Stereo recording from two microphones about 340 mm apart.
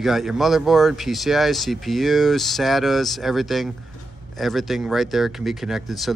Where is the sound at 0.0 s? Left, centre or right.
Centre.